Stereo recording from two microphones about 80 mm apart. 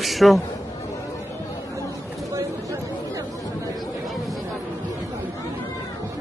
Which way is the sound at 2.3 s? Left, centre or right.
Right.